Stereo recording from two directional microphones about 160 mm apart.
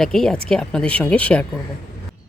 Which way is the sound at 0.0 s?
5° left (ahead or behind).